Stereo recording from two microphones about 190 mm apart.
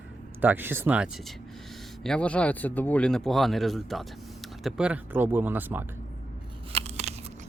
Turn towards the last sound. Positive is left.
turn(degrees=-35)  # may be behind; listen again after turning